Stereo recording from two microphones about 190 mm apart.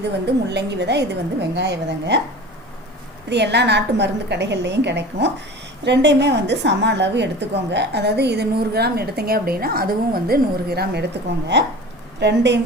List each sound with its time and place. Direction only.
0.5 s a woman's voice: 65° right (ahead or behind)
3.2 s a woman's voice: 65° right (ahead or behind)
12.2 s a woman's voice: 65° right (ahead or behind)